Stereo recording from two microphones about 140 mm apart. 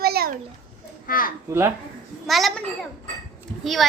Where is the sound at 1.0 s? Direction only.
90° left.